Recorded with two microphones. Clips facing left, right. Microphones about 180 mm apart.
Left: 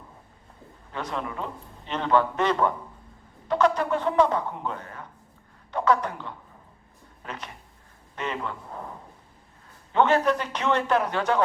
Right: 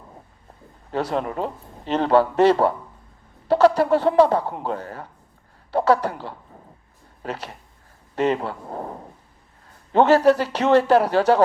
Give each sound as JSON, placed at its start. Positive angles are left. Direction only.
{"t": 0.9, "sound": "a man's voice", "side_deg": -35}